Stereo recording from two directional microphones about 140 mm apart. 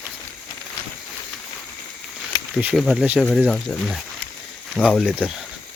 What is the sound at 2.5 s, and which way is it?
Speech, 10° right (ahead or behind).